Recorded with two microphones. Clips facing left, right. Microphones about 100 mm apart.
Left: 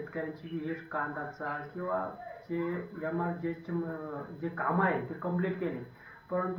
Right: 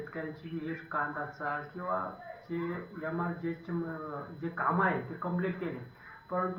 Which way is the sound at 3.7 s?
20° right (ahead or behind).